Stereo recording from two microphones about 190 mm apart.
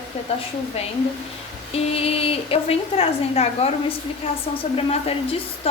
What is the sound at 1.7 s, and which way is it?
A woman's voice, 30° left (ahead or behind).